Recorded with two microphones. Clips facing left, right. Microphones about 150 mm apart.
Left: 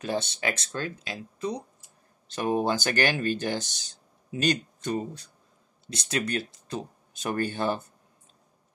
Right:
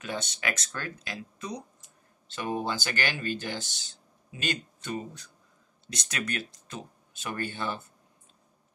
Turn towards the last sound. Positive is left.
turn(degrees=45)  # may be behind; listen again after turning